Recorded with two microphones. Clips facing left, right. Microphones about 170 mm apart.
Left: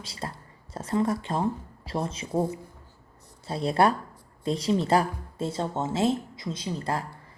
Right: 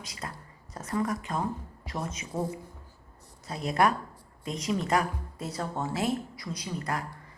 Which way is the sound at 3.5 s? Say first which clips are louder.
Left 3 dB; 30° left (ahead or behind).